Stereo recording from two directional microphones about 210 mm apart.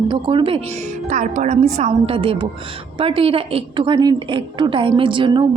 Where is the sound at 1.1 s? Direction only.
35° right (ahead or behind).